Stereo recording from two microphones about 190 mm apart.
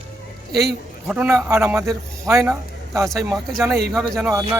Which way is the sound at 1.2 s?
15° right (ahead or behind).